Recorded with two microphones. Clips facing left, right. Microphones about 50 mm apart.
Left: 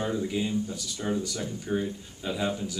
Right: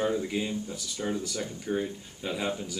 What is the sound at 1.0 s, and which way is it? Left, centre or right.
Speech, centre.